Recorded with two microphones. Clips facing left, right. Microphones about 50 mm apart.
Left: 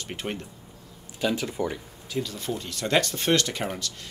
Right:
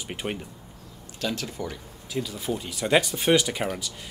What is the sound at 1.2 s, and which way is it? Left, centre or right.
Speech, centre.